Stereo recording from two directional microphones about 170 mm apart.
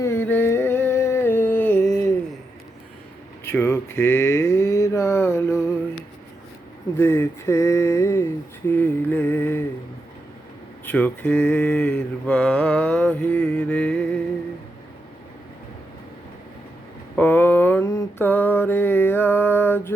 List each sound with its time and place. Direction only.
0.0 s a sound: 15° left (ahead or behind)
3.4 s mantra: 15° left (ahead or behind)
7.0 s mantra: 15° left (ahead or behind)
10.8 s mantra: 10° left (ahead or behind)
17.2 s mantra: 10° left (ahead or behind)